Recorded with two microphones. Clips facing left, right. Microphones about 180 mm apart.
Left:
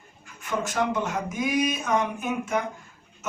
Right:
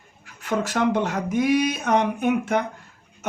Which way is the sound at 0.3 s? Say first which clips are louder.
Right 4 dB; 65° right (ahead or behind).